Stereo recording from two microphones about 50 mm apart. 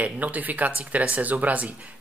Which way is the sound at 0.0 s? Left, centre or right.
Right.